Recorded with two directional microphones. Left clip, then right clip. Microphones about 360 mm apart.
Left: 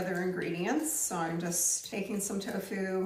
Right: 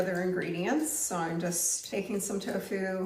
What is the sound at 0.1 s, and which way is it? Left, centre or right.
A woman's voice, centre.